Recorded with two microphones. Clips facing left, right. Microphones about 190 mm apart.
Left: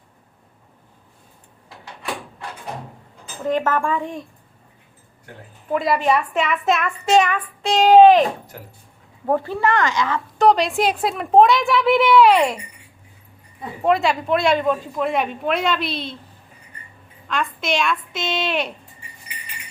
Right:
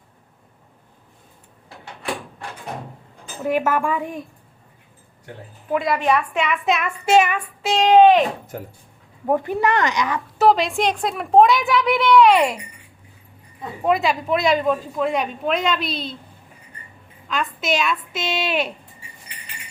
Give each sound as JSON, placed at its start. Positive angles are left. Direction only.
{"t": 3.4, "sound": "speech", "side_deg": -10}
{"t": 5.7, "sound": "a woman's voice", "side_deg": 0}
{"t": 9.2, "sound": "speech", "side_deg": -15}
{"t": 10.3, "sound": "a woman's voice", "side_deg": 0}
{"t": 13.8, "sound": "a woman's voice", "side_deg": 0}
{"t": 17.6, "sound": "speech", "side_deg": -5}